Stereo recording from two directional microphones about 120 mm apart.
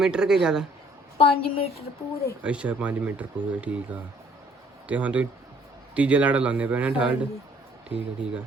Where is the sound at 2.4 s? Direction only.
10° right (ahead or behind).